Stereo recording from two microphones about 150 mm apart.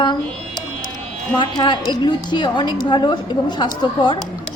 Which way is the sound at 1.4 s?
30° left (ahead or behind).